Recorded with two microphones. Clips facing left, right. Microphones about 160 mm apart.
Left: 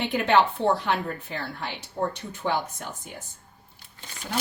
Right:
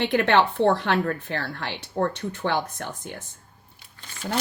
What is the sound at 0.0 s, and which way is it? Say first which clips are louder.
A woman's voice: right 2 dB; 80° right.